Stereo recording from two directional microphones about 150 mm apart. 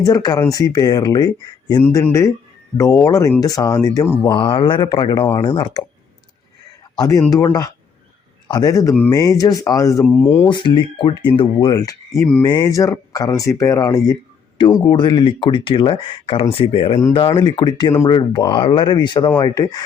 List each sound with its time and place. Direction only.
0.0 s speech: 25° left (ahead or behind)
4.3 s speech: 30° left (ahead or behind)
6.9 s speech: 25° left (ahead or behind)
8.4 s speech: 25° left (ahead or behind)
10.5 s speech: 30° left (ahead or behind)
11.7 s speech: 20° left (ahead or behind)